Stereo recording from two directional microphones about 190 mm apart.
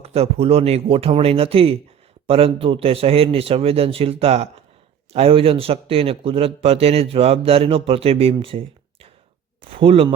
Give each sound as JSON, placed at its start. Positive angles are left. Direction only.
{"t": 0.0, "sound": "speech", "side_deg": -30}